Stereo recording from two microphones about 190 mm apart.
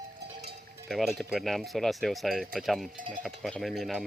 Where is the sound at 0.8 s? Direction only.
Centre (ahead or behind).